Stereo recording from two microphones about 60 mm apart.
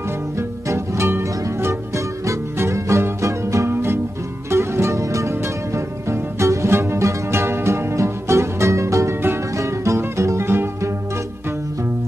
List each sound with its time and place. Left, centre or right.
0.4 s music: right
3.7 s music: right